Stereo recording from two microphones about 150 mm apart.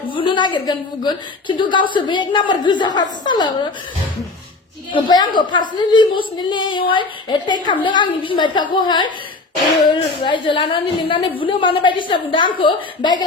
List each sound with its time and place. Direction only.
0.1 s a woman's voice: 35° left (ahead or behind)
4.9 s a woman's voice: 30° left (ahead or behind)
10.2 s a woman's voice: 35° left (ahead or behind)